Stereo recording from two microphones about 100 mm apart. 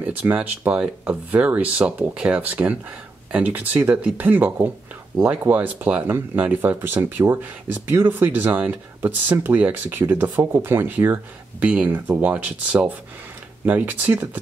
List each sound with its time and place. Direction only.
0.0 s speech: 15° right (ahead or behind)